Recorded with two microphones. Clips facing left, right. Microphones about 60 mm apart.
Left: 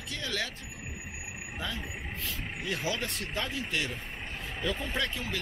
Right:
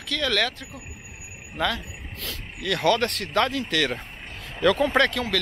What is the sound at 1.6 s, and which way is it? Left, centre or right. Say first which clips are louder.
Speech: right 11 dB; right.